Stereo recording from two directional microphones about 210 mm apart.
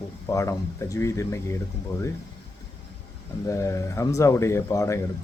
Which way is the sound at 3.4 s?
15° left (ahead or behind).